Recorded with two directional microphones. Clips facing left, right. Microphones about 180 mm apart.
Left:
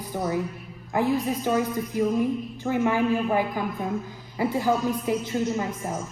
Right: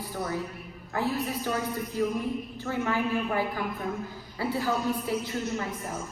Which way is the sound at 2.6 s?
15° left (ahead or behind).